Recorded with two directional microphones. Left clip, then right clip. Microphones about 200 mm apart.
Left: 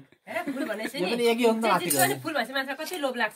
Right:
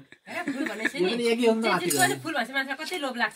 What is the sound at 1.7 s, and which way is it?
Speech, 50° left (ahead or behind).